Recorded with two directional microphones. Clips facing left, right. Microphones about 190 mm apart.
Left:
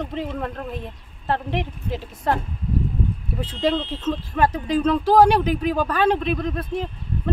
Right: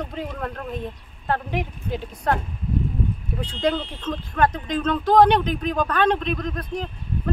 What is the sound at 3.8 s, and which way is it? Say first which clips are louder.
Speech: left 4 dB; 25° left (ahead or behind).